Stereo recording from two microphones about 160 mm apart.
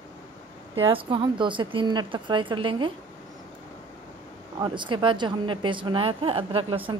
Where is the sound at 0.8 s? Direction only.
30° right (ahead or behind).